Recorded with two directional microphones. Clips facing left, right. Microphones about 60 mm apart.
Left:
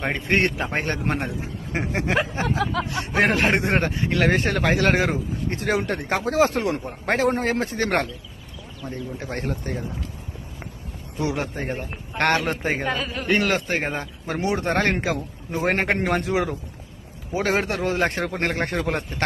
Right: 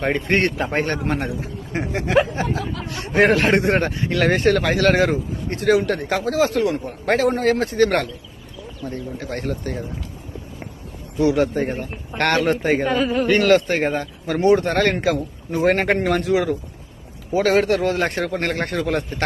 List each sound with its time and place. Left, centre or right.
0.0 s a man's voice: centre
1.4 s a man's voice: left
3.1 s a man's voice: centre; by 6.8 s left
6.8 s a man's voice: left
9.3 s a man's voice: left
11.2 s a man's voice: left
11.5 s a man's voice: centre
13.2 s a man's voice: centre